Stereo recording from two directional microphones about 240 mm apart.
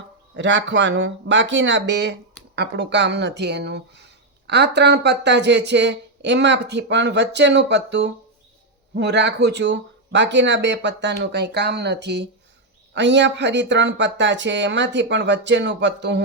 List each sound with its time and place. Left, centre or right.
0.3 s speech: right